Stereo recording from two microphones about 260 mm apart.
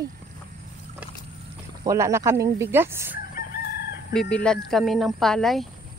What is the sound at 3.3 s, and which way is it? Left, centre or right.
Crowing, left.